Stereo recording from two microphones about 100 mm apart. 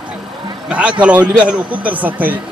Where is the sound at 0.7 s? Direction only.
10° right (ahead or behind).